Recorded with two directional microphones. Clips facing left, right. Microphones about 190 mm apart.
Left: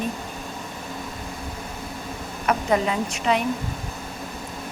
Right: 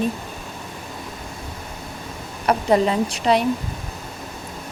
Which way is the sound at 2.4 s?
35° right (ahead or behind).